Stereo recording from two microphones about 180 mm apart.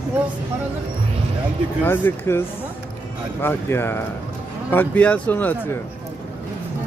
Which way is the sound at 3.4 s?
10° left (ahead or behind).